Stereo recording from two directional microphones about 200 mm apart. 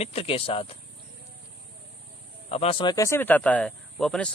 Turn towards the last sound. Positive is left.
turn(degrees=5)  # may be behind; listen again after turning